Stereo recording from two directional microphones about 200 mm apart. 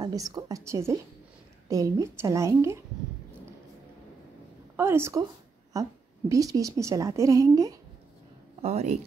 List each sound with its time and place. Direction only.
0.0 s a woman's voice: 20° right (ahead or behind)
4.7 s a woman's voice: 10° right (ahead or behind)
8.5 s speech: 30° right (ahead or behind)